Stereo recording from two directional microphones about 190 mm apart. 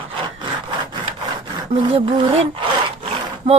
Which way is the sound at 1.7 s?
30° right (ahead or behind).